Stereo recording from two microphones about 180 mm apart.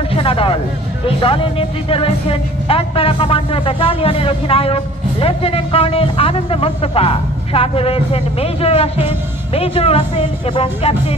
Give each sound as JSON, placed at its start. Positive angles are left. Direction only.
{"t": 0.1, "sound": "speech", "side_deg": 30}